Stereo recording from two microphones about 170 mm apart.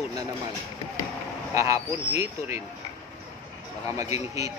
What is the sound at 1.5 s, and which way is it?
Speech, 15° right (ahead or behind).